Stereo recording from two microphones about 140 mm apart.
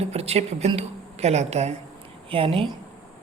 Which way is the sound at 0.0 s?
50° right (ahead or behind).